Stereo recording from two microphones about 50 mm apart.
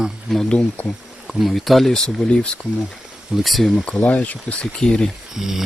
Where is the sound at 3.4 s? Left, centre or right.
Centre.